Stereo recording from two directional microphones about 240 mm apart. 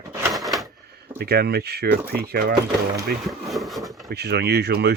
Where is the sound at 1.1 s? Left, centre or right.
Right.